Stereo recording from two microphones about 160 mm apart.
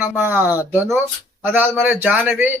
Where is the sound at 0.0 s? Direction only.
10° right (ahead or behind).